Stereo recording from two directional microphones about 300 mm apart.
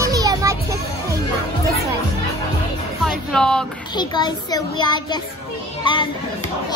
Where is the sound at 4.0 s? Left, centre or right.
Centre.